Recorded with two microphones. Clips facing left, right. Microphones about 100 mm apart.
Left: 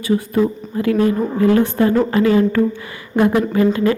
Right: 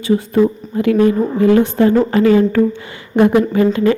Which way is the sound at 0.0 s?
25° right (ahead or behind).